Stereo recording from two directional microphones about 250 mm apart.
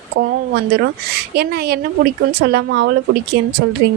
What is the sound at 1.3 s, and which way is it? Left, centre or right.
A woman's voice, right.